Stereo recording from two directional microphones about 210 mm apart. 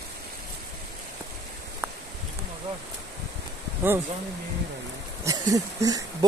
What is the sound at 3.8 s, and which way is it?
Speech, 10° right (ahead or behind).